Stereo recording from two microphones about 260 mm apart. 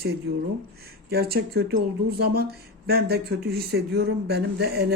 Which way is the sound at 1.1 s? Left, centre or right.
Right.